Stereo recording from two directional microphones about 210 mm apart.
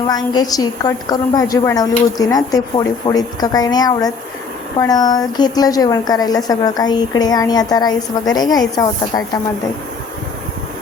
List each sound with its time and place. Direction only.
0.1 s a woman's voice: 15° left (ahead or behind)